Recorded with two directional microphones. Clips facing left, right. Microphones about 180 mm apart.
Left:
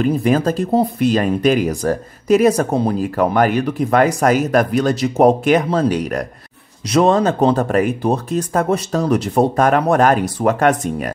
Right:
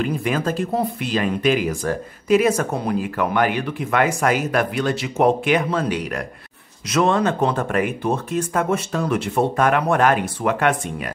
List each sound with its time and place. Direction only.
0.0 s speech: 40° left (ahead or behind)